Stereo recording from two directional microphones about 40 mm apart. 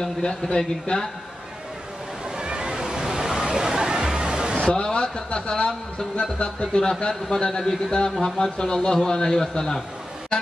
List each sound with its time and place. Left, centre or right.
0.0 s speech: centre
2.3 s a sound: right
4.6 s a man's voice: left